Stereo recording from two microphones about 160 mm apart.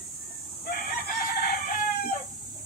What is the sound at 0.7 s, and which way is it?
Chicken, 70° left (ahead or behind).